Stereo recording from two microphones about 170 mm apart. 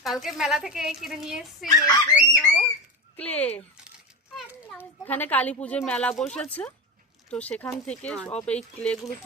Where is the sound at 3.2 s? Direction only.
10° left (ahead or behind).